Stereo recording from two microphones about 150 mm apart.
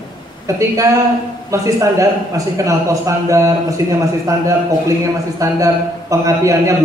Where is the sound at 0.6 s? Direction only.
20° right (ahead or behind).